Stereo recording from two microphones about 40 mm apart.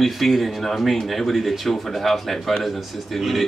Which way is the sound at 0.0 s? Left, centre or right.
Centre.